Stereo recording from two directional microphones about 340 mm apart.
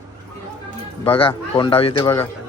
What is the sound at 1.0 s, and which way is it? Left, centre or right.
A man's voice, centre.